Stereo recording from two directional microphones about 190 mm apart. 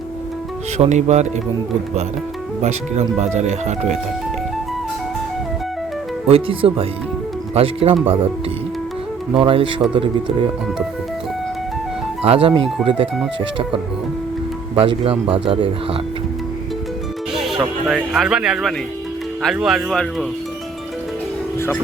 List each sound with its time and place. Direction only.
0.8 s speech: 35° right (ahead or behind)
2.6 s speech: 35° right (ahead or behind)
6.2 s speech: 30° right (ahead or behind)
9.3 s speech: 30° right (ahead or behind)
12.2 s speech: 30° right (ahead or behind)
14.8 s speech: 30° right (ahead or behind)
17.3 s speech: centre (ahead or behind)